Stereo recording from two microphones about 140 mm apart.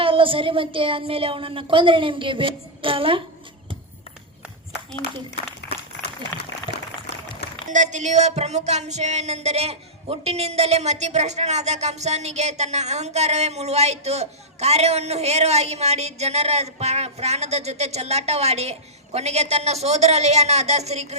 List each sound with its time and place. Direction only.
0.0 s a woman's voice: 40° right (ahead or behind)
7.7 s music: 60° right (ahead or behind)